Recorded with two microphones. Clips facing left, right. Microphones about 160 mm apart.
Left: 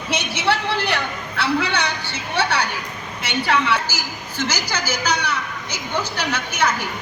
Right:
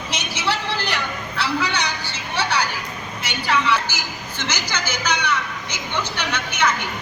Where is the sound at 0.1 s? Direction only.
60° left (ahead or behind).